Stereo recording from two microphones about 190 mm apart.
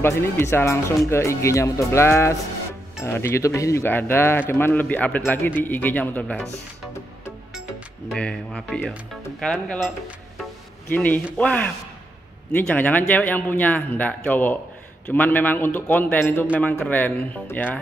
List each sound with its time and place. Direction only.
0.0 s speech: 10° left (ahead or behind)
8.1 s speech: 5° left (ahead or behind)